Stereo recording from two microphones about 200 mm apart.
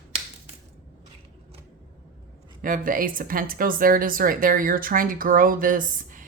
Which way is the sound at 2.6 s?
45° right (ahead or behind).